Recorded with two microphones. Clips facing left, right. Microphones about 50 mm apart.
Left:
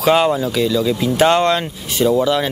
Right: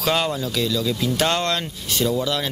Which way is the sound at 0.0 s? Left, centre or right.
Centre.